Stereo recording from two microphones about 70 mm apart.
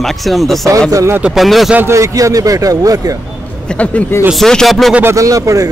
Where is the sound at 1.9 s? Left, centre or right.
Right.